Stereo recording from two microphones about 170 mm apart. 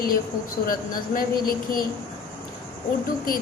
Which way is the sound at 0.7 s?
55° left (ahead or behind).